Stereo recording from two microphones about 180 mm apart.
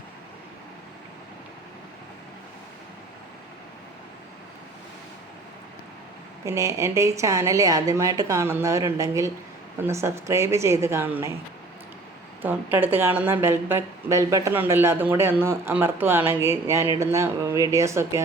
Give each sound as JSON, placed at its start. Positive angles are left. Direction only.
{"t": 6.4, "sound": "speech", "side_deg": -15}
{"t": 12.4, "sound": "speech", "side_deg": -10}